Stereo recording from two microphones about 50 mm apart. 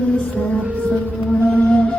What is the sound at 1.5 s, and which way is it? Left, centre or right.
Music, left.